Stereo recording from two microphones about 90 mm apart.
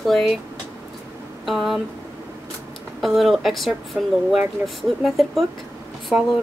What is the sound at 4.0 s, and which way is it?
Speech, 15° right (ahead or behind).